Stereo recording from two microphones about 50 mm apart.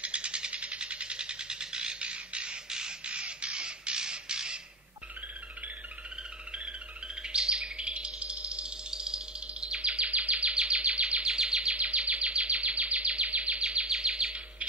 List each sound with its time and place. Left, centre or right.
0.0 s a sound: right
7.2 s bird: centre
10.7 s bird vocalization: right
11.3 s bird: centre
11.7 s a sound: right
13.9 s bird vocalization: centre